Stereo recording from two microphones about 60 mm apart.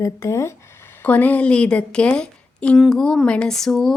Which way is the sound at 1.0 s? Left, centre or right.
Left.